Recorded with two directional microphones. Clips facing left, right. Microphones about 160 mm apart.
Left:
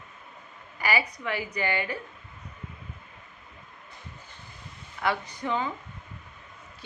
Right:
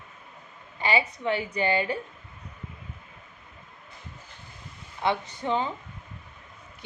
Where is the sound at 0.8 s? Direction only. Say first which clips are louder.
Right 2 dB; 25° right (ahead or behind).